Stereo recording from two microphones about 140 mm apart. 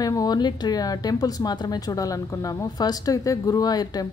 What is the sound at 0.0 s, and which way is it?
Speech, 25° left (ahead or behind).